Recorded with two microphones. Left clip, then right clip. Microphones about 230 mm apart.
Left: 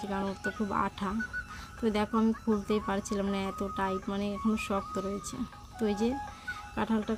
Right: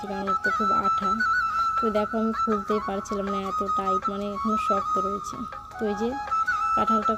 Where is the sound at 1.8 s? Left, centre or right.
Centre.